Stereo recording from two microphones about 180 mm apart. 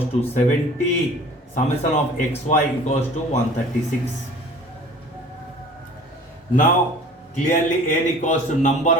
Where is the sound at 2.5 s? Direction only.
40° left (ahead or behind).